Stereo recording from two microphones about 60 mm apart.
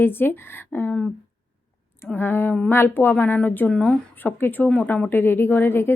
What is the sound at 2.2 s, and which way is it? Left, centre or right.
A woman's voice, left.